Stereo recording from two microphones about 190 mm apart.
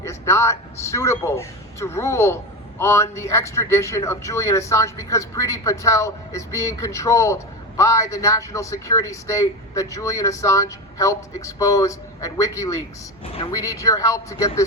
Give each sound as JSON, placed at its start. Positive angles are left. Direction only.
{"t": 0.0, "sound": "a man's voice", "side_deg": 15}